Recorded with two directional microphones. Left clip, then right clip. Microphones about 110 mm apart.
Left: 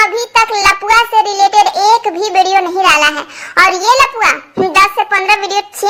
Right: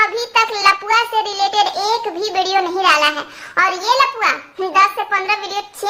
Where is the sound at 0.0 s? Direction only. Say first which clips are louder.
Left 5 dB; 35° left (ahead or behind).